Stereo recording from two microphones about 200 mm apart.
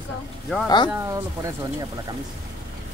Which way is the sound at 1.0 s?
15° right (ahead or behind).